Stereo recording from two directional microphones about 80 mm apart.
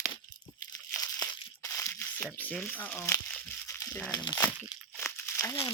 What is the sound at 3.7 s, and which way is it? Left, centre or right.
Crumpling, left.